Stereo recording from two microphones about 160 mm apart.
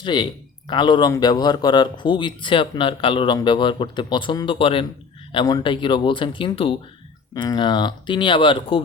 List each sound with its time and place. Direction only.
0.0 s speech: 30° left (ahead or behind)